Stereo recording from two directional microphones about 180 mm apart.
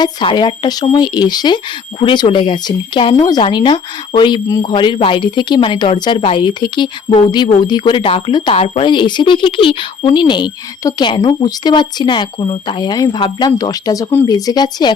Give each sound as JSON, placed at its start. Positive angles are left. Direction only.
{"t": 0.0, "sound": "speech", "side_deg": 25}